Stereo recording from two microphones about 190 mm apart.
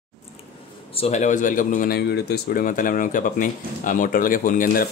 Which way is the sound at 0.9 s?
35° left (ahead or behind).